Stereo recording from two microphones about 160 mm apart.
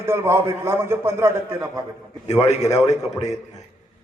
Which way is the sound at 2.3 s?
45° left (ahead or behind).